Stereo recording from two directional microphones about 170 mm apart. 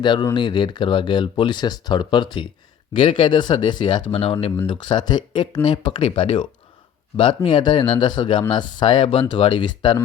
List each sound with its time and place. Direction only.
0.0 s speech: 25° left (ahead or behind)